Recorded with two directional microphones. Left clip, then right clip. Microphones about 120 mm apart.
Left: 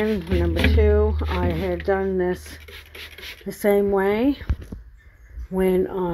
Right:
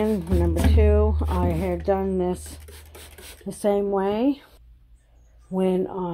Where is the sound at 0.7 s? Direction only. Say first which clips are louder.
Left 2 dB; 40° right (ahead or behind).